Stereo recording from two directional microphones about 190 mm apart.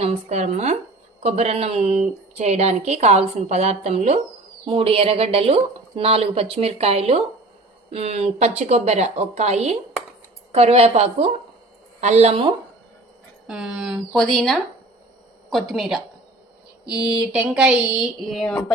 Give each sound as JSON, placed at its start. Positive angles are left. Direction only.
{"t": 0.0, "sound": "a woman's voice", "side_deg": -35}
{"t": 13.5, "sound": "speech", "side_deg": -5}